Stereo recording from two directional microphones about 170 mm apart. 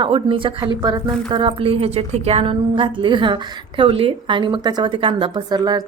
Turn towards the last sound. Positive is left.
turn(degrees=-25)  # may be behind; listen again after turning